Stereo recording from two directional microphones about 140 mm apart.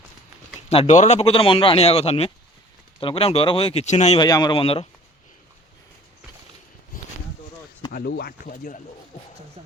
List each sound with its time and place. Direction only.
0.7 s speech: 50° left (ahead or behind)
4.2 s speech: 30° left (ahead or behind)
7.9 s speech: 85° left
9.6 s speech: 50° right (ahead or behind)